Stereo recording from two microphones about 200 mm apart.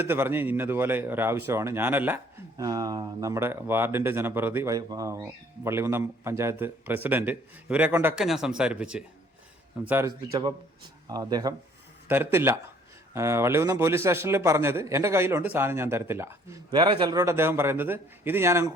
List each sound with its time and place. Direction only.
0.0 s speech: 10° right (ahead or behind)